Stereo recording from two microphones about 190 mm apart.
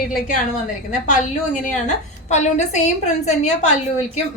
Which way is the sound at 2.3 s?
35° left (ahead or behind).